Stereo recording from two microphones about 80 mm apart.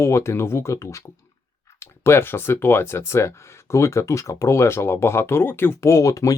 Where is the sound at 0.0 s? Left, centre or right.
Left.